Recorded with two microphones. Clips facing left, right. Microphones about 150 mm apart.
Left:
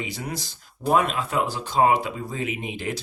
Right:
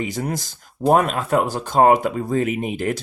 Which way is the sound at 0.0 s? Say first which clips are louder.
Right 7 dB; 45° right (ahead or behind).